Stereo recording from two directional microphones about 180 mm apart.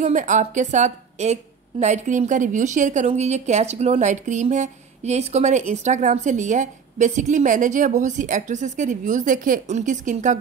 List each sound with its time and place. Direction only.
0.0 s a woman's voice: 45° right (ahead or behind)